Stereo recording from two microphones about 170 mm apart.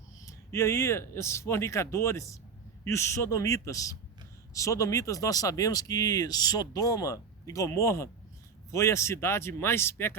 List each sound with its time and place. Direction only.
0.2 s speech: 15° left (ahead or behind)